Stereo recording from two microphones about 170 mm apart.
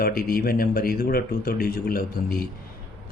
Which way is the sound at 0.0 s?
60° left (ahead or behind).